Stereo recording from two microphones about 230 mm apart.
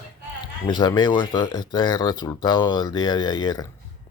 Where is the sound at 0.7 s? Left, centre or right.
Centre.